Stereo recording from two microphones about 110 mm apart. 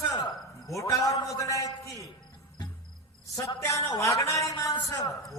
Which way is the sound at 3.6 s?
25° left (ahead or behind).